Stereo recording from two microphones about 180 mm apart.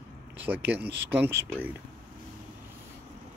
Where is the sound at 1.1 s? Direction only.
10° right (ahead or behind).